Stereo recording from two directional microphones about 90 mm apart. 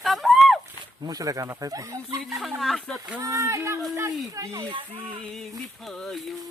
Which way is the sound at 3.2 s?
35° right (ahead or behind).